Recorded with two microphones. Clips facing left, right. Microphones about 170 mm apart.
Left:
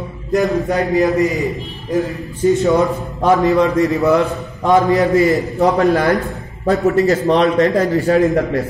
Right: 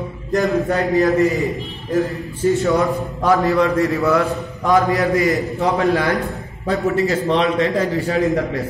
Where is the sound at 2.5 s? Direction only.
20° left (ahead or behind).